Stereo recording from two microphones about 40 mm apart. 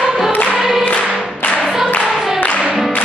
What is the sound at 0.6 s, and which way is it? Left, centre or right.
Music, centre.